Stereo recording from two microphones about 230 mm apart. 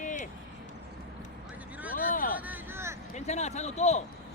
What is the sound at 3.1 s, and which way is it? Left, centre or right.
Speech, left.